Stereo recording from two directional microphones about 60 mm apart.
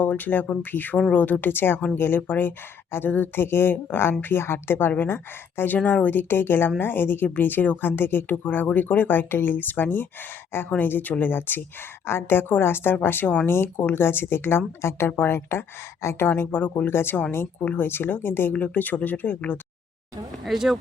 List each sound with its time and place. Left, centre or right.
0.0 s speech: left
16.9 s speech: left
20.4 s speech: centre